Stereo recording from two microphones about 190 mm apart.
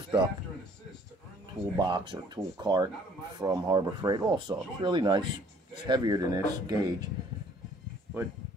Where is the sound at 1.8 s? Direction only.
25° right (ahead or behind).